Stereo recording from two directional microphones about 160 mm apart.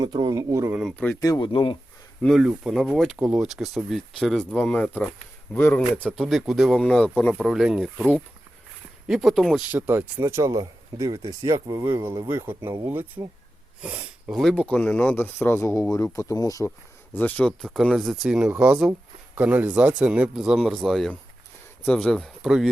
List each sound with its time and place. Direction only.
0.0 s speech: 25° right (ahead or behind)
0.8 s speech: 5° left (ahead or behind)
1.2 s speech: 25° left (ahead or behind)
2.2 s speech: centre (ahead or behind)
7.3 s speech: centre (ahead or behind)
9.7 s speech: 15° right (ahead or behind); by 16.7 s 20° left (ahead or behind)
17.2 s speech: 10° left (ahead or behind)